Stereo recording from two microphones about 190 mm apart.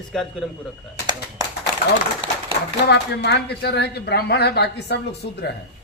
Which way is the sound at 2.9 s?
60° left (ahead or behind).